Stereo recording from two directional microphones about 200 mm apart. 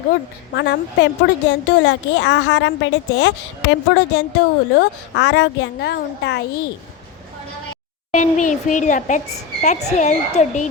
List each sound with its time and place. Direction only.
0.5 s a woman's voice: 60° left (ahead or behind)
8.1 s a child's voice: 40° left (ahead or behind)